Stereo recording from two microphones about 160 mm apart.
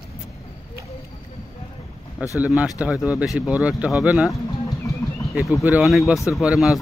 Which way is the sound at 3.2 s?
5° right (ahead or behind).